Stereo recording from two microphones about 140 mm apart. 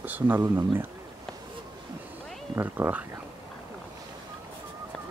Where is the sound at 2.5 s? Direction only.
15° right (ahead or behind).